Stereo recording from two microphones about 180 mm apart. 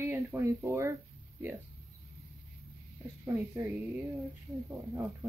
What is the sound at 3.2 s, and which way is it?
Speech, 15° right (ahead or behind).